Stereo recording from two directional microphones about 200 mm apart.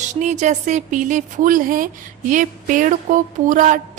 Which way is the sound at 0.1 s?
35° right (ahead or behind).